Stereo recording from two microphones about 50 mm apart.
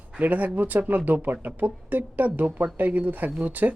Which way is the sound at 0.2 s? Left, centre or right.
Right.